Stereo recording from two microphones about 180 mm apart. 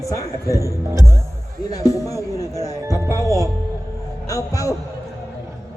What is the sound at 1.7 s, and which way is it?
Speech, 20° left (ahead or behind).